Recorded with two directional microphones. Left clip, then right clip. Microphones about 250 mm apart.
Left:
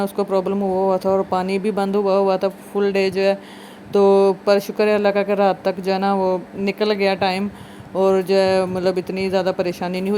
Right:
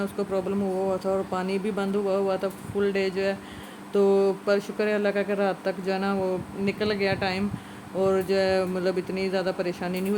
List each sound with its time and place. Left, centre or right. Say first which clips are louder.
0.0 s speech: left 8 dB; left